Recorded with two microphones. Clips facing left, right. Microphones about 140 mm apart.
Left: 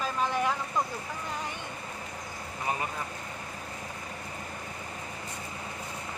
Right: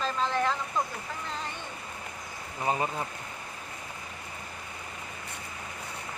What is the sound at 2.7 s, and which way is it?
Speech, 25° right (ahead or behind).